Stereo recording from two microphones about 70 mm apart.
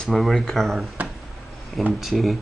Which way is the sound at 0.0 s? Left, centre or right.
Centre.